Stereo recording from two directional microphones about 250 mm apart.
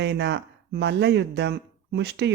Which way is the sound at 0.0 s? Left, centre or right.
Right.